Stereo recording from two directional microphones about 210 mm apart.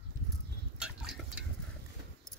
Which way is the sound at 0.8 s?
5° right (ahead or behind).